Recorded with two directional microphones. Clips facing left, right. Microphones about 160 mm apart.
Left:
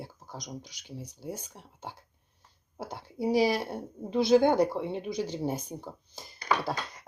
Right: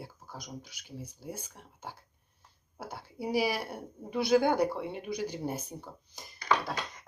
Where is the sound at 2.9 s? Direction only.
10° right (ahead or behind).